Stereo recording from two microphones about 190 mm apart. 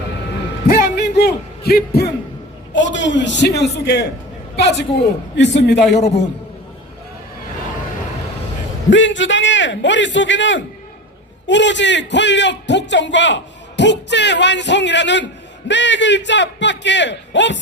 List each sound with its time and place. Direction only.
0.7 s a sound: 60° left (ahead or behind)
2.7 s a man's voice: 75° left (ahead or behind)
8.9 s a man's voice: 75° left (ahead or behind)